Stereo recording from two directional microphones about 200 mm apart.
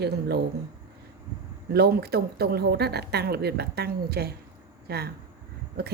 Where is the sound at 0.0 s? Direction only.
55° right (ahead or behind).